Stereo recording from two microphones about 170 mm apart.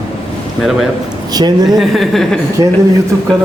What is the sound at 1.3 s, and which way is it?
Speech, 25° right (ahead or behind).